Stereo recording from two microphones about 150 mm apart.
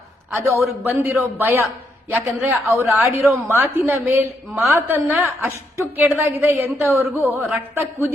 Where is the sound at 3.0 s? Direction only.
20° right (ahead or behind).